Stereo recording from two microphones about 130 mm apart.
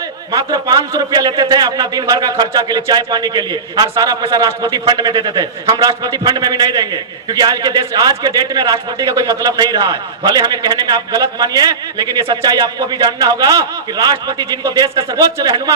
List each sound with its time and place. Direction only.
0.3 s speech: 30° right (ahead or behind)